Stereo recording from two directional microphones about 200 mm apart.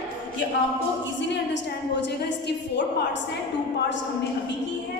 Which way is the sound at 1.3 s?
60° left (ahead or behind).